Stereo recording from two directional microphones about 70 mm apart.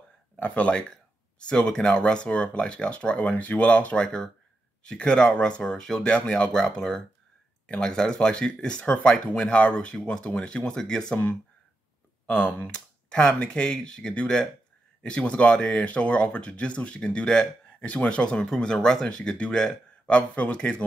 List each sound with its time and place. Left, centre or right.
0.4 s speech: centre
12.3 s speech: centre